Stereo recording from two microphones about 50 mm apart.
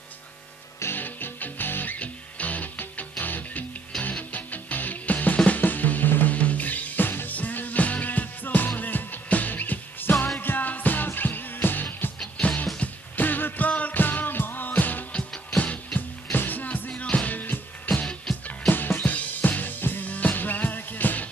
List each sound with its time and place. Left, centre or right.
0.9 s music: left
2.0 s music: left
12.4 s music: left
16.9 s music: left
18.0 s music: centre
18.7 s music: left